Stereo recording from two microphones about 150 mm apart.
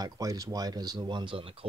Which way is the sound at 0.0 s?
25° right (ahead or behind).